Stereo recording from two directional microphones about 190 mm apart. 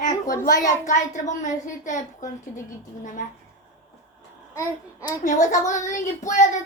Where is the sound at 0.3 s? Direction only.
45° left (ahead or behind).